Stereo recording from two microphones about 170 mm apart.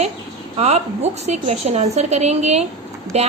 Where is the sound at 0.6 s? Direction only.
40° right (ahead or behind).